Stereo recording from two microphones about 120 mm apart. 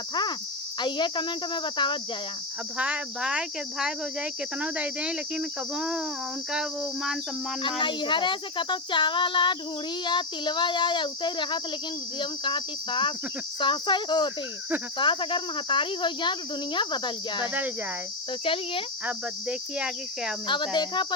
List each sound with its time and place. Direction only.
0.1 s speech: 40° left (ahead or behind)
2.7 s speech: 10° right (ahead or behind)
6.5 s cricket: 5° right (ahead or behind)
7.8 s speech: 40° left (ahead or behind)
19.0 s speech: 10° right (ahead or behind)
20.5 s speech: 40° left (ahead or behind)